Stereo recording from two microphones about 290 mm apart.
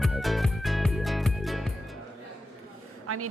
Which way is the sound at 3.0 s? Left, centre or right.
Right.